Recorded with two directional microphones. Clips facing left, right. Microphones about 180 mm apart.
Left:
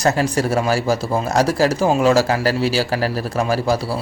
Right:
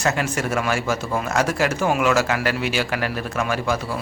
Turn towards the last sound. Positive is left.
turn(degrees=35)  # may be behind; listen again after turning